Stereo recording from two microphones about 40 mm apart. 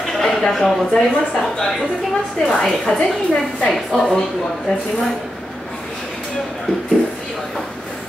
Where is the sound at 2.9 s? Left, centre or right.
Centre.